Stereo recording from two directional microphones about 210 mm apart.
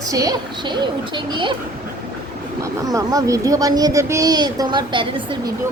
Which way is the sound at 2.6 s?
15° right (ahead or behind).